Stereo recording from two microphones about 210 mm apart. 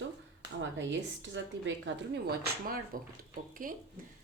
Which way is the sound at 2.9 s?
40° right (ahead or behind).